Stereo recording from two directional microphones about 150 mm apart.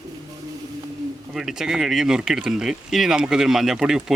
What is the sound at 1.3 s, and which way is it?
Speech, centre (ahead or behind).